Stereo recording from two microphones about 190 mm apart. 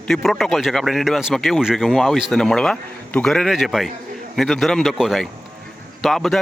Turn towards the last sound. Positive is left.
turn(degrees=0)  # may be behind; listen again after turning